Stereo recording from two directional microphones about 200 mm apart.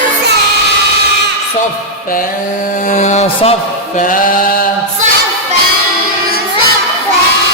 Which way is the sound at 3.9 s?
40° left (ahead or behind).